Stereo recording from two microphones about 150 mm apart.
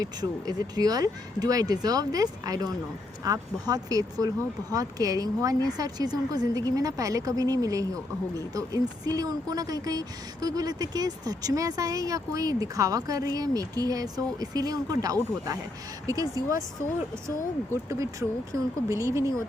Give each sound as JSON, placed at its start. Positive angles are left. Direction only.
{"t": 0.0, "sound": "speech", "side_deg": -25}
{"t": 17.8, "sound": "speech", "side_deg": -20}